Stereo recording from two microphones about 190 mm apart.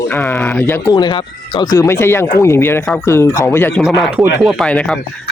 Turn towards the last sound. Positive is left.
turn(degrees=5)  # may be behind; listen again after turning